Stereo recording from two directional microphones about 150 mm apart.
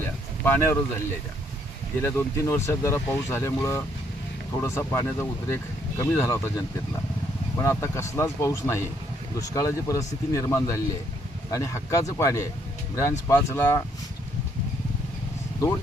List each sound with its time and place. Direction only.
0.0 s a sound: 15° left (ahead or behind)
2.0 s speech: 15° left (ahead or behind)
7.5 s speech: 20° left (ahead or behind)